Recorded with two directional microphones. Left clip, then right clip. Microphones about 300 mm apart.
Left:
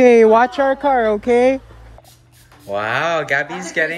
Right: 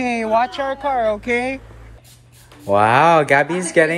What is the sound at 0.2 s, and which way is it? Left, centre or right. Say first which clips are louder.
Speech: left 6 dB; left.